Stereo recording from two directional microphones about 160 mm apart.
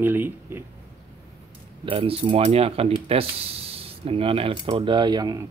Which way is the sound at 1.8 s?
35° right (ahead or behind).